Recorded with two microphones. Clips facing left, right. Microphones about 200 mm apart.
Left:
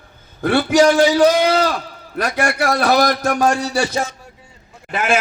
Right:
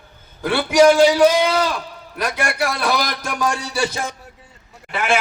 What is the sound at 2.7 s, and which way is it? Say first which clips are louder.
Speech: left 6 dB; 55° left (ahead or behind).